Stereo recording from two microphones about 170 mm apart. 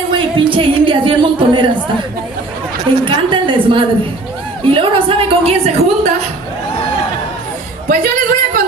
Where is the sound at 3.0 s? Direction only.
30° right (ahead or behind).